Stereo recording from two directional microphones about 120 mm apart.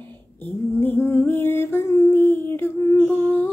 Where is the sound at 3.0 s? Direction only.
20° left (ahead or behind).